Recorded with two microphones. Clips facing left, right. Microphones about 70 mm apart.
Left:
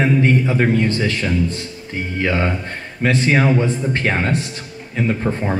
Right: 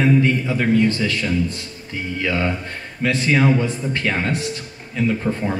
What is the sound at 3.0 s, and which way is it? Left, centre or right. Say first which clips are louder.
Mantra: left 3 dB; left.